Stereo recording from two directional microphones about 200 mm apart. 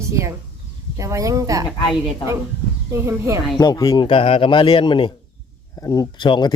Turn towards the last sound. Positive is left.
turn(degrees=25)  # may be behind; listen again after turning